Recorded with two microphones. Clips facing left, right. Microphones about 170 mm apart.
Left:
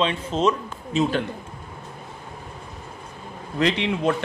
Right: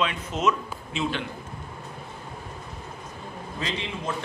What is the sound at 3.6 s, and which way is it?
Speech, 70° left (ahead or behind).